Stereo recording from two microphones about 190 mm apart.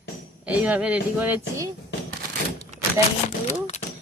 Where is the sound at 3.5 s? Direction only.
35° left (ahead or behind).